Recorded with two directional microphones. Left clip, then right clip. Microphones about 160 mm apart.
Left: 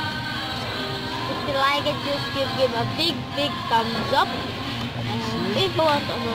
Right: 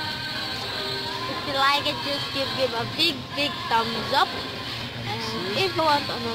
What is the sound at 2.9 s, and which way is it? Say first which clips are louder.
Speech: even; 25° right (ahead or behind).